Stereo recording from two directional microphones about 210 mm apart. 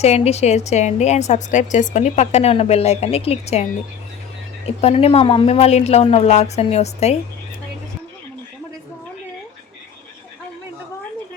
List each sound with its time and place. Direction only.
0.0 s a woman's voice: 30° left (ahead or behind)